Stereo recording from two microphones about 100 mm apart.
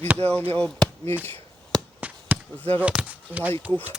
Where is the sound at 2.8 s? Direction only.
15° right (ahead or behind).